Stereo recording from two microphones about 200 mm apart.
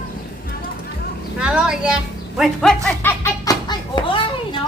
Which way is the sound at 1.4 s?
5° right (ahead or behind).